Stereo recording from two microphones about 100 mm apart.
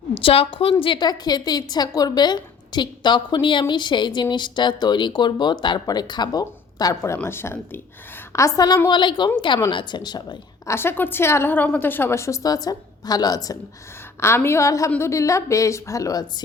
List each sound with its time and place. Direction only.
0.1 s a woman's voice: 70° left (ahead or behind); by 6.9 s 40° left (ahead or behind)
7.2 s a woman's voice: 25° left (ahead or behind); by 8.8 s 40° left (ahead or behind)
8.9 s a woman's voice: 50° left (ahead or behind)
10.7 s a woman's voice: 25° left (ahead or behind)
14.2 s a woman's voice: 25° left (ahead or behind)